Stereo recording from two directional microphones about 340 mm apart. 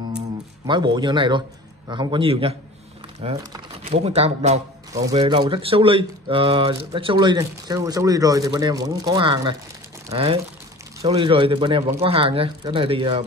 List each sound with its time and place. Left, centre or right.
0.7 s speech: centre